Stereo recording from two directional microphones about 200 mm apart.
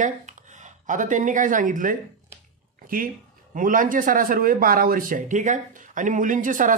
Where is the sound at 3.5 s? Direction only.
40° right (ahead or behind).